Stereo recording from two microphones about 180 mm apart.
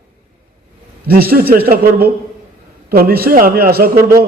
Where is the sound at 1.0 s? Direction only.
55° right (ahead or behind).